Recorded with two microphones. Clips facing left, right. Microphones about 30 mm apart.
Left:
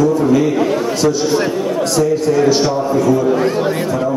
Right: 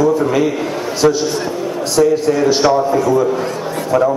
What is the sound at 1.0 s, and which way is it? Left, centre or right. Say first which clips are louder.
Speech: right 4 dB; right.